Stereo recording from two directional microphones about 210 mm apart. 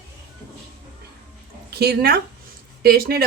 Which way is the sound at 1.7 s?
50° right (ahead or behind).